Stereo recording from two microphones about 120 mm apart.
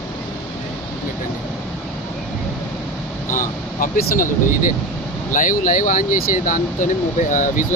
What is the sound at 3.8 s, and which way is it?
Speech, 90° left.